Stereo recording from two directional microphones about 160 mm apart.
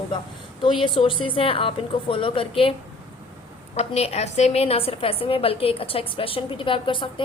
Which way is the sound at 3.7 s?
40° left (ahead or behind).